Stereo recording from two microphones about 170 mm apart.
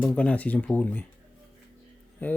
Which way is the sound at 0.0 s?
5° left (ahead or behind).